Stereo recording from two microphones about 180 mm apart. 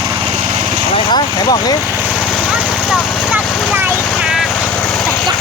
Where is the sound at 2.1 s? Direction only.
Centre (ahead or behind).